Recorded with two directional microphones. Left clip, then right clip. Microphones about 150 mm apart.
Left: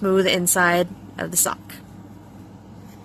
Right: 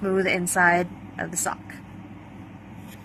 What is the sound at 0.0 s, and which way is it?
Speech, 55° left (ahead or behind).